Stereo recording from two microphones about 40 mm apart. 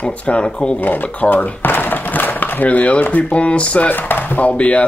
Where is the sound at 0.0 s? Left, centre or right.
Left.